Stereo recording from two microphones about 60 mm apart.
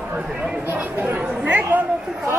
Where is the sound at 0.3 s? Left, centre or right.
Centre.